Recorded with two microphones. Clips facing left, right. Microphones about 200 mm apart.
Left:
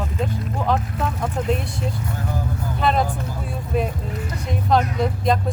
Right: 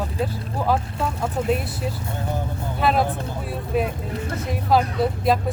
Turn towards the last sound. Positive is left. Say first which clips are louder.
# even
turn(degrees=-5)  # may be behind; listen again after turning